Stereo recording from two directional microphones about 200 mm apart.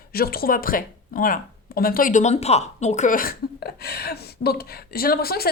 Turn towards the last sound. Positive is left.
turn(degrees=50)  # may be behind; listen again after turning